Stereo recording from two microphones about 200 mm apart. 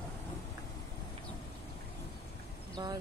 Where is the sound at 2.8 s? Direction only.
25° right (ahead or behind).